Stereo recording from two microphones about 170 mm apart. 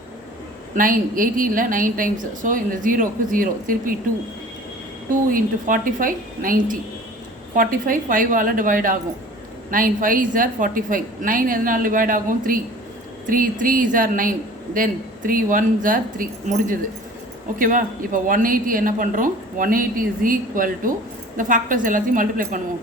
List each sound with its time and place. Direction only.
0.8 s a woman's voice: 55° right (ahead or behind)
5.3 s a woman's voice: 55° right (ahead or behind)